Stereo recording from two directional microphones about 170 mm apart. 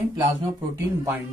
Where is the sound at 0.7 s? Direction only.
20° right (ahead or behind).